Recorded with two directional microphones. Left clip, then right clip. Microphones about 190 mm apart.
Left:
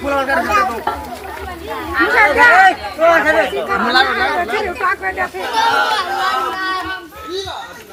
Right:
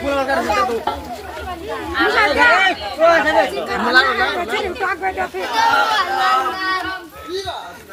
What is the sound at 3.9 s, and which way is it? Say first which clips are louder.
Speech: right 1 dB; 55° left (ahead or behind).